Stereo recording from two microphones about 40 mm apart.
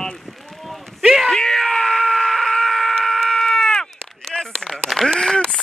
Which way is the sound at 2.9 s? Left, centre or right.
Centre.